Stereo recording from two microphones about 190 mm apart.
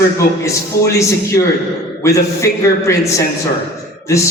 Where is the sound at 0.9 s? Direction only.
15° left (ahead or behind).